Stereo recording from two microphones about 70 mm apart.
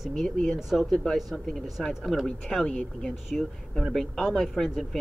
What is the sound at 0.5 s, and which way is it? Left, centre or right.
Speech, centre.